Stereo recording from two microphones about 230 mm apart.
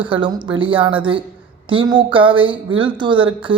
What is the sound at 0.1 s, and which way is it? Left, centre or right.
Speech, right.